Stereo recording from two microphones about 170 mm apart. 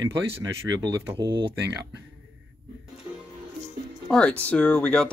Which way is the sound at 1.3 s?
25° right (ahead or behind).